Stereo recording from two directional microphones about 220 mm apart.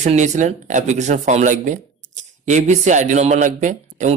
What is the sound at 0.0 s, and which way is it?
Speech, 30° right (ahead or behind).